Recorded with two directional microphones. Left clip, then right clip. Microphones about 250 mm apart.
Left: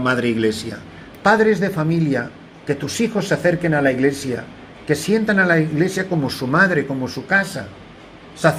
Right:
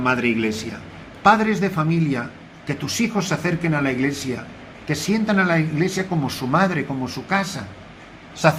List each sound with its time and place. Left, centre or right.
0.0 s a man's voice: centre